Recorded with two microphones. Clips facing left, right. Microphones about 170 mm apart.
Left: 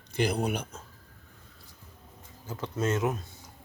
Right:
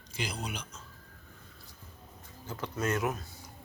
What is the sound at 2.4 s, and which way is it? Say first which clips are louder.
Speech: left 3 dB; 20° left (ahead or behind).